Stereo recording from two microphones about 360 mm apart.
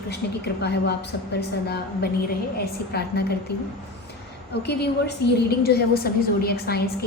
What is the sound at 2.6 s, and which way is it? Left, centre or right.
A woman's voice, left.